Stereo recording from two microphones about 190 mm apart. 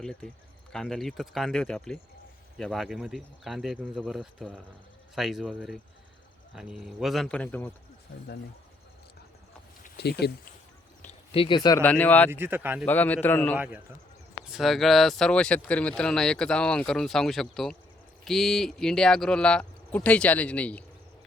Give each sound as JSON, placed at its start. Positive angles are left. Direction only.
{"t": 0.0, "sound": "speech", "side_deg": 5}
{"t": 9.8, "sound": "speech", "side_deg": 60}
{"t": 11.0, "sound": "a sound", "side_deg": 25}
{"t": 11.8, "sound": "a man's voice", "side_deg": 5}
{"t": 12.3, "sound": "speech", "side_deg": -10}
{"t": 12.8, "sound": "a man's voice", "side_deg": 10}
{"t": 13.6, "sound": "speech", "side_deg": -10}